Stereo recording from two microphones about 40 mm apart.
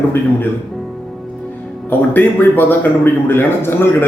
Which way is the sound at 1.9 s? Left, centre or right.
Left.